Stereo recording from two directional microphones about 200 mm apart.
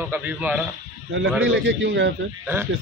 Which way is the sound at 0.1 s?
10° right (ahead or behind).